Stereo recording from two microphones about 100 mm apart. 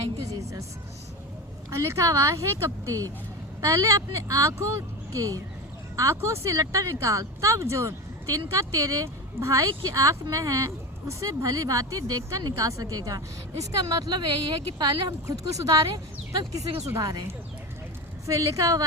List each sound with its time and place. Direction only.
1.7 s speech: 30° right (ahead or behind)
14.1 s speech: 50° right (ahead or behind)
18.3 s speech: 35° right (ahead or behind)